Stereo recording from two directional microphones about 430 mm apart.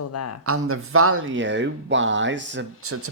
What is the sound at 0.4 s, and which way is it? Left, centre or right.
Speech, right.